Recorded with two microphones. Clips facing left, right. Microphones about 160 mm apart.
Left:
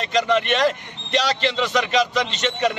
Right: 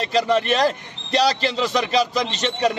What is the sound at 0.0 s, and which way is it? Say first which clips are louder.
A man's voice: right 1 dB; 35° right (ahead or behind).